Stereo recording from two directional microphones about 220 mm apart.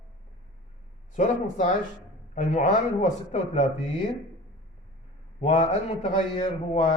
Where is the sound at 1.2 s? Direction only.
35° left (ahead or behind).